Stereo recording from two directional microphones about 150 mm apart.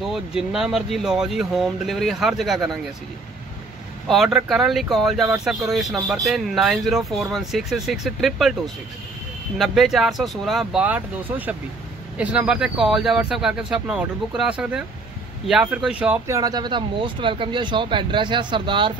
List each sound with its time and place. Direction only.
0.0 s speech: centre (ahead or behind)
4.1 s speech: centre (ahead or behind)
9.6 s speech: centre (ahead or behind)
16.3 s speech: 25° right (ahead or behind)